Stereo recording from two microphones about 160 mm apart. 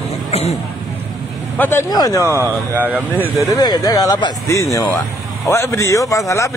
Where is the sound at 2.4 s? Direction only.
10° right (ahead or behind).